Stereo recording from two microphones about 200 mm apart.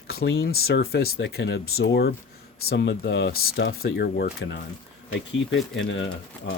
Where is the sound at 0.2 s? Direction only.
60° left (ahead or behind).